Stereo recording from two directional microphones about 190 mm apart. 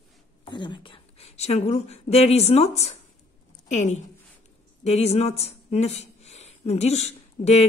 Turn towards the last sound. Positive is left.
turn(degrees=35)  # may be behind; listen again after turning